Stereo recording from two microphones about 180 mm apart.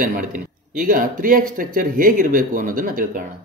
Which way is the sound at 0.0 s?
50° right (ahead or behind).